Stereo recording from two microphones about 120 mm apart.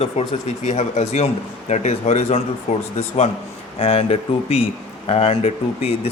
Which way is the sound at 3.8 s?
55° left (ahead or behind).